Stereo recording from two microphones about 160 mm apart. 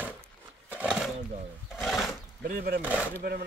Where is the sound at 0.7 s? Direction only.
5° right (ahead or behind).